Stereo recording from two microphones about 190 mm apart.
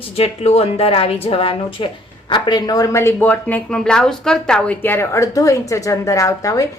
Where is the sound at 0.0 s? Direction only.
35° left (ahead or behind).